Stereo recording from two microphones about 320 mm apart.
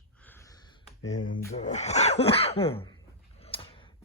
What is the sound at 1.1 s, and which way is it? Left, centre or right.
Speech, left.